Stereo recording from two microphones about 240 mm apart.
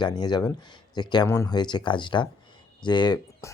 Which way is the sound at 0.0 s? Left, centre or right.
Centre.